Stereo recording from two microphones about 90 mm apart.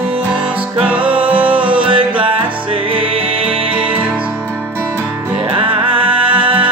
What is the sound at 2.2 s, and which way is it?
Music, 85° right.